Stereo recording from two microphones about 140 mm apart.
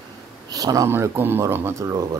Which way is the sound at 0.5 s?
25° right (ahead or behind).